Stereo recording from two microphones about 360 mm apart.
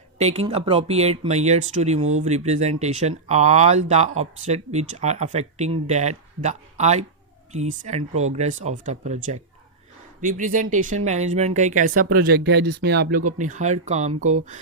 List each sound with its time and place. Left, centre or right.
0.2 s speech: centre